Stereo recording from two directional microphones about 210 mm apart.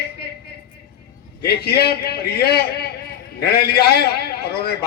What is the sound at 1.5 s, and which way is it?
A man's voice, 50° left (ahead or behind).